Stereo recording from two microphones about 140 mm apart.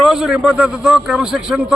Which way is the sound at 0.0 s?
5° right (ahead or behind).